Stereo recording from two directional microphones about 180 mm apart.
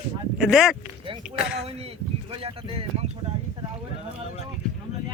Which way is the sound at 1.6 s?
35° right (ahead or behind).